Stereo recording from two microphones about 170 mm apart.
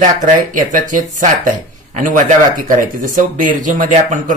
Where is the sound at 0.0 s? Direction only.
45° right (ahead or behind).